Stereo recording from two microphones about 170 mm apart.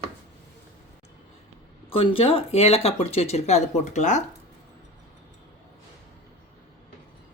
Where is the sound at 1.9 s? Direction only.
35° left (ahead or behind).